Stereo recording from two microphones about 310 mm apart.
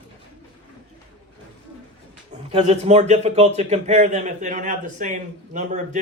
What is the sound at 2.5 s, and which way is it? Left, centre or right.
Speech, centre.